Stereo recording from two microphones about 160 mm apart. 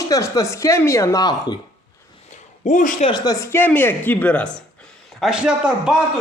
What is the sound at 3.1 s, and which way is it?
A woman's voice, 25° left (ahead or behind).